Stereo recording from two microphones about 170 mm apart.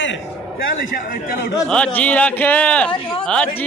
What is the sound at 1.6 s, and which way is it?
A man's voice, 5° left (ahead or behind).